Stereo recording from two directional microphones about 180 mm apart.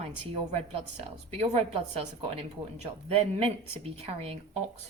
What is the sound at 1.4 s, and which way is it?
Speech, 35° right (ahead or behind).